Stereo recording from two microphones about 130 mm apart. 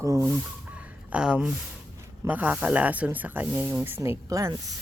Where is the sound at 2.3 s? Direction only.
15° right (ahead or behind).